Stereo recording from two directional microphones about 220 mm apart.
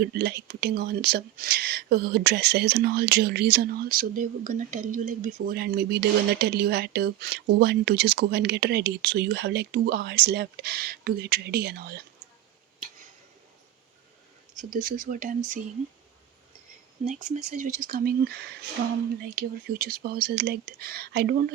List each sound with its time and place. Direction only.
0.1 s speech: 45° right (ahead or behind)
14.6 s speech: 40° right (ahead or behind)
17.1 s speech: 35° right (ahead or behind)